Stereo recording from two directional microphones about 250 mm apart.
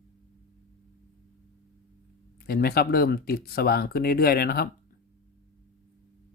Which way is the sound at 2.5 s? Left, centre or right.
Left.